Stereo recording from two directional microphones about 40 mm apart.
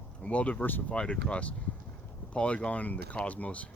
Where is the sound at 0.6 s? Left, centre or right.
Left.